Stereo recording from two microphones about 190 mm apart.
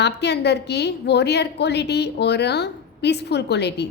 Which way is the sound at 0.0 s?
60° left (ahead or behind).